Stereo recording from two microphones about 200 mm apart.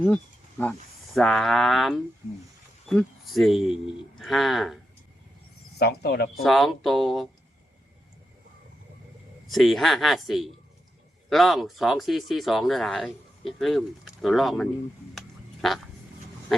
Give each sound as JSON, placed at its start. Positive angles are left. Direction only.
{"t": 0.6, "sound": "speech", "side_deg": 0}
{"t": 5.8, "sound": "speech", "side_deg": 55}
{"t": 6.4, "sound": "speech", "side_deg": 0}
{"t": 9.5, "sound": "speech", "side_deg": 0}